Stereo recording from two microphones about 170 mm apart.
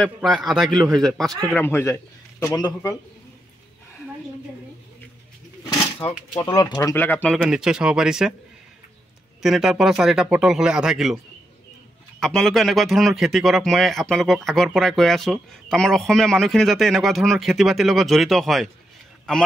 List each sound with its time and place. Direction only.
0.0 s a man's voice: centre (ahead or behind)
1.5 s a man's voice: 10° left (ahead or behind)
5.7 s a sound: 20° left (ahead or behind)
6.4 s speech: 20° left (ahead or behind)
7.4 s a man's voice: 5° right (ahead or behind)
9.4 s a man's voice: centre (ahead or behind)
12.2 s a man's voice: 5° left (ahead or behind)